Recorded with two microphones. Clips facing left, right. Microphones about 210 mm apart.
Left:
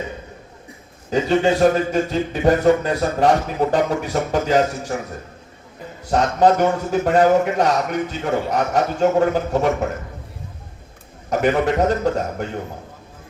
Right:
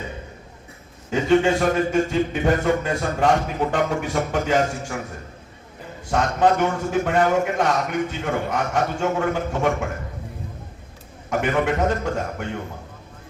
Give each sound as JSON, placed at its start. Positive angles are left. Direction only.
{"t": 1.1, "sound": "a man's voice", "side_deg": 40}
{"t": 6.1, "sound": "a man's voice", "side_deg": 40}
{"t": 11.3, "sound": "a man's voice", "side_deg": 40}